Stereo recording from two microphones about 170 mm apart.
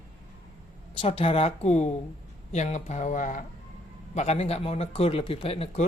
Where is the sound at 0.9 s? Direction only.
35° left (ahead or behind).